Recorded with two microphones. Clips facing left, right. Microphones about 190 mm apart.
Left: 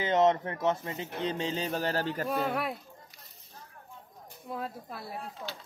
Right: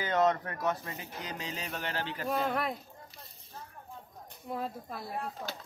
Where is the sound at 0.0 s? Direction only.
20° left (ahead or behind); by 2.2 s 40° left (ahead or behind).